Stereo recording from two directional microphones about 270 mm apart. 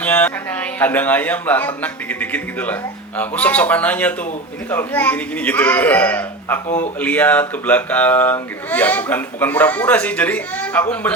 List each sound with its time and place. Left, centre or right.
0.0 s a man's voice: centre
6.7 s speech: left
7.0 s speech: centre